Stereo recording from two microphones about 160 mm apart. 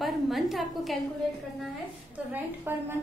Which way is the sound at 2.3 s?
15° right (ahead or behind).